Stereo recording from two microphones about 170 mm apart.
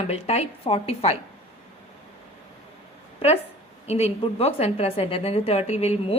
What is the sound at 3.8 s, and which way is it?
A woman's voice, 40° left (ahead or behind).